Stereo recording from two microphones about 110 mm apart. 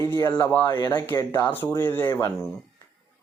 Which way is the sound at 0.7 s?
45° left (ahead or behind).